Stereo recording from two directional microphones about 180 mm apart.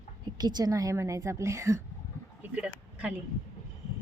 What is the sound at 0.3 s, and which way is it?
A woman's voice, 25° right (ahead or behind).